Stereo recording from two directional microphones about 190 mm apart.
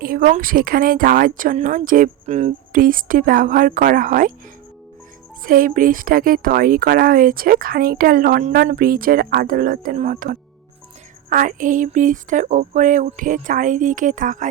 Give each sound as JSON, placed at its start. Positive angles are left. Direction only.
{"t": 0.0, "sound": "speech", "side_deg": -50}
{"t": 5.4, "sound": "speech", "side_deg": -45}